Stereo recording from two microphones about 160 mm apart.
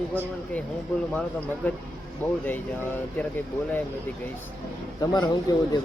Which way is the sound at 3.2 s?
10° left (ahead or behind).